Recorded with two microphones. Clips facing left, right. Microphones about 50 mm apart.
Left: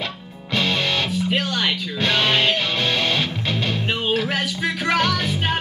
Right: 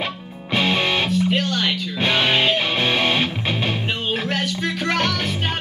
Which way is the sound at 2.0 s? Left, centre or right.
Centre.